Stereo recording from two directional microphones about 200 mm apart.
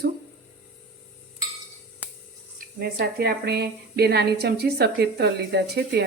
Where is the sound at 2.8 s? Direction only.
50° right (ahead or behind).